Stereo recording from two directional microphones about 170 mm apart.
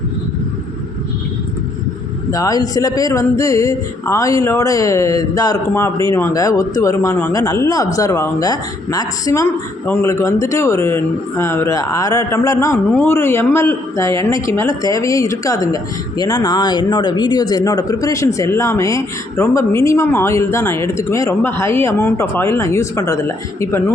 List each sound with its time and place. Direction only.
2.3 s a man's voice: 20° left (ahead or behind)